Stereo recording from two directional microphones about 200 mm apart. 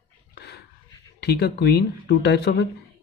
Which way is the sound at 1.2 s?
55° left (ahead or behind).